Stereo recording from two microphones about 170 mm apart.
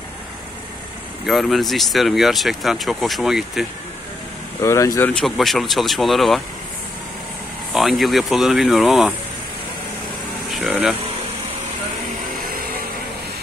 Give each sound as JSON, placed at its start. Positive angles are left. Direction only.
{"t": 1.2, "sound": "speech", "side_deg": 0}
{"t": 4.6, "sound": "speech", "side_deg": 15}
{"t": 5.2, "sound": "speech", "side_deg": 0}
{"t": 7.7, "sound": "speech", "side_deg": 0}
{"t": 10.5, "sound": "a sound", "side_deg": 0}